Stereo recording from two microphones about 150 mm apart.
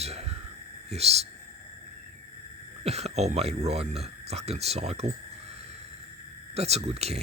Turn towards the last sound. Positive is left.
turn(degrees=-45)  # may be behind; listen again after turning